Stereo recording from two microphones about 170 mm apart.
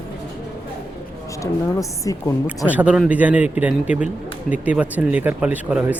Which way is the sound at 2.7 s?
10° right (ahead or behind).